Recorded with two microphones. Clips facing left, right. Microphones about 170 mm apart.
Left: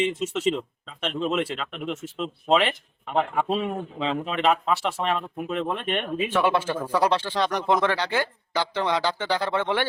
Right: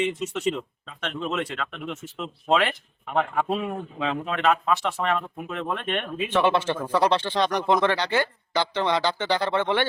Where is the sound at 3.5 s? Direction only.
25° left (ahead or behind).